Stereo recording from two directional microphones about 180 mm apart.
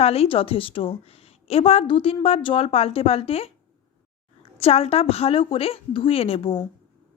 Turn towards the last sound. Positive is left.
turn(degrees=35)  # may be behind; listen again after turning